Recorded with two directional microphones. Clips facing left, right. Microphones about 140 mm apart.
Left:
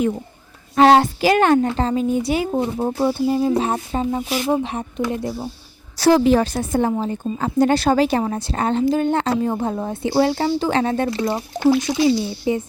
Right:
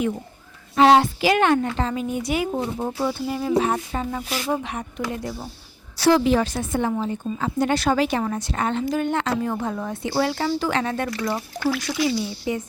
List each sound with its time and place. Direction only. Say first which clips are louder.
0.8 s a woman's voice: left 2 dB; 45° left (ahead or behind); by 4.6 s 15° left (ahead or behind)
4.6 s a woman's voice: left 5 dB; 25° left (ahead or behind)
6.0 s a woman's voice: left 3 dB; 40° left (ahead or behind); by 12.6 s 25° left (ahead or behind)